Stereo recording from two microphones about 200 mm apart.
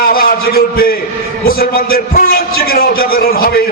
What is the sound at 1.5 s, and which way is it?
A man's voice, 50° left (ahead or behind).